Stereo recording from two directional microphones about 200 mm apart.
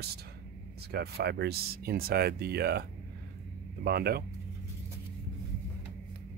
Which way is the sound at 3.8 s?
50° right (ahead or behind).